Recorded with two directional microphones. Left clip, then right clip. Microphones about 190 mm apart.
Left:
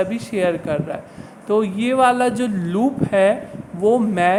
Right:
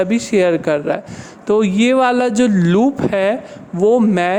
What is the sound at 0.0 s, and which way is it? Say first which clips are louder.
Speech: right 5 dB; 40° right (ahead or behind).